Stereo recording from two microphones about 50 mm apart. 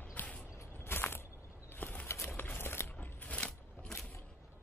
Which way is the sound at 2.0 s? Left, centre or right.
Left.